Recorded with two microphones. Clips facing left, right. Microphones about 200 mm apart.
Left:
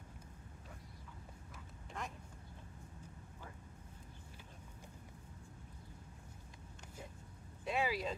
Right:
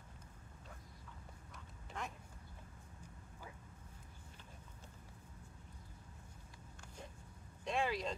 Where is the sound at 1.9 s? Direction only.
Centre (ahead or behind).